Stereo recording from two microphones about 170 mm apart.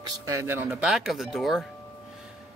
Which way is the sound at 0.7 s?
Centre (ahead or behind).